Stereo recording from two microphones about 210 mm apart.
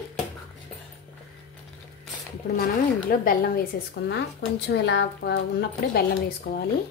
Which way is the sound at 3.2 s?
40° left (ahead or behind).